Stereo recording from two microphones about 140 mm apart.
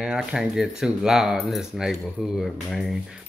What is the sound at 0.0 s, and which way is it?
Speech, 5° right (ahead or behind).